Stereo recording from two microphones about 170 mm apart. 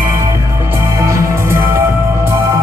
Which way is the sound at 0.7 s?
15° right (ahead or behind).